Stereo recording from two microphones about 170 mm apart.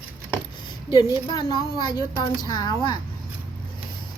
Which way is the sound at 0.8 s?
25° left (ahead or behind).